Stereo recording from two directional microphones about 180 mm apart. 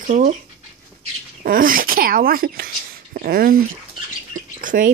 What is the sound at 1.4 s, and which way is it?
Speech, 50° right (ahead or behind).